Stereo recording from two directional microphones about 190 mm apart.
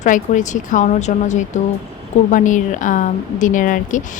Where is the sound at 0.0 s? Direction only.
40° left (ahead or behind).